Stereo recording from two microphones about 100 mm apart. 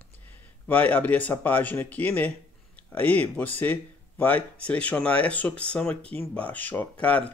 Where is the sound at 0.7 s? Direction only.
15° left (ahead or behind).